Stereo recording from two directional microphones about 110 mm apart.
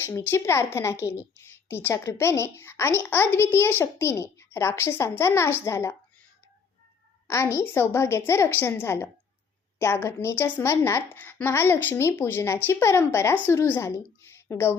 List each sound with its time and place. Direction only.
0.0 s a woman's voice: 20° left (ahead or behind)
7.3 s a woman's voice: 25° left (ahead or behind)